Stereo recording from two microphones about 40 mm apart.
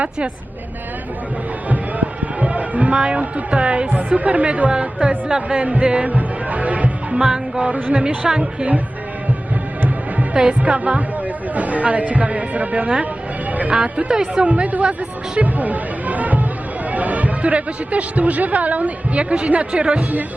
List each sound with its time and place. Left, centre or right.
1.7 s a sound: right
3.9 s a man's voice: right
4.7 s music: right
6.1 s music: right
7.2 s music: centre
10.3 s a man's voice: right
13.7 s a man's voice: right
14.1 s speech: centre
14.4 s a man's voice: right
15.4 s music: right
16.9 s a man's voice: right